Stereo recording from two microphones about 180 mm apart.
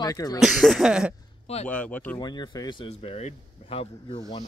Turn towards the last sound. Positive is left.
turn(degrees=35)  # may be behind; listen again after turning